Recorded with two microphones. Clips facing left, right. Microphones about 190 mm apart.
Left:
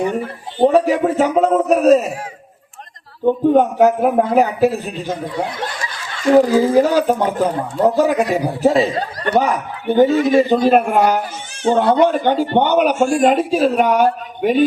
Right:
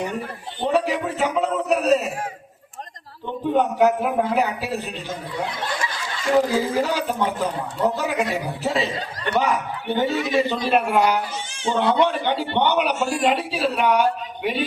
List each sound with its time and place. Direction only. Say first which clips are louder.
0.1 s a man's voice: left 7 dB; 50° left (ahead or behind)
3.2 s a man's voice: left 8 dB; 45° left (ahead or behind)
6.3 s a man's voice: left 8 dB; 45° left (ahead or behind)